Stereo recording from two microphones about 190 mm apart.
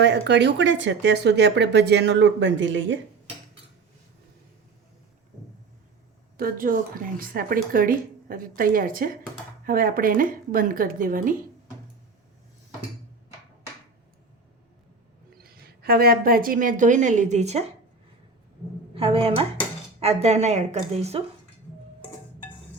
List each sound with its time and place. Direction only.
0.0 s speech: 65° right (ahead or behind)
6.3 s a woman's voice: 50° right (ahead or behind)
15.4 s a woman's voice: 55° right (ahead or behind); by 17.7 s 35° right (ahead or behind)
18.9 s a woman's voice: 30° right (ahead or behind)